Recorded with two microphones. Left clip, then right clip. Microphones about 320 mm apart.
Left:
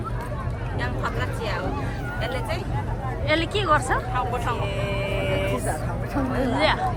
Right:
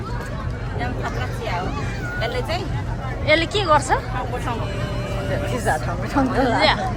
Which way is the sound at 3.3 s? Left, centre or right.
Centre.